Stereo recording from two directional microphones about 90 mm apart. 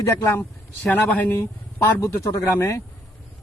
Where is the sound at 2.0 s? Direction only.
40° left (ahead or behind).